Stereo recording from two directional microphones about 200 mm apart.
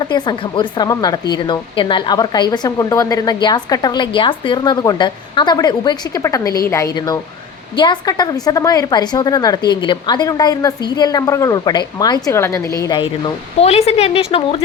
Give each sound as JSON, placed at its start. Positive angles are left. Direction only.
{"t": 0.1, "sound": "a woman's voice", "side_deg": 25}